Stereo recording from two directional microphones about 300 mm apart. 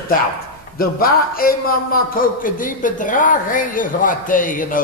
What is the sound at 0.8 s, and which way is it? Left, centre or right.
A woman's voice, left.